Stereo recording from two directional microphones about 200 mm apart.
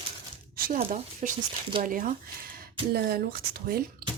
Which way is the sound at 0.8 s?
40° right (ahead or behind).